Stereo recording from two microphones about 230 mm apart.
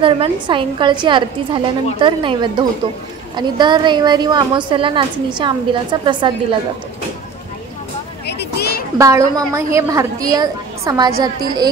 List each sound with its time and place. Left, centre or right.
0.0 s a woman's voice: right
8.3 s a sound: left
8.9 s a woman's voice: centre